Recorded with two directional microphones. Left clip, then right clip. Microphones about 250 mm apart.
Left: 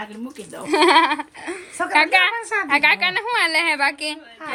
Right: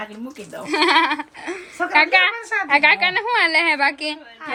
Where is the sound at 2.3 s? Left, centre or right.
Left.